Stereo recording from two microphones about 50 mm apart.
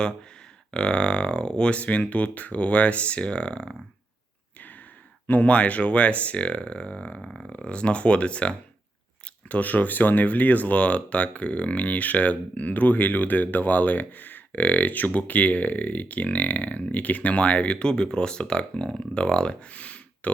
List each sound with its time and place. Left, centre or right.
0.7 s speech: centre
5.3 s speech: left
7.2 s speech: centre
7.5 s speech: left
9.5 s speech: left